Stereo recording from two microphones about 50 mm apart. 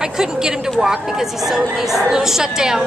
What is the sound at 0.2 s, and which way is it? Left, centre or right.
A woman's voice, centre.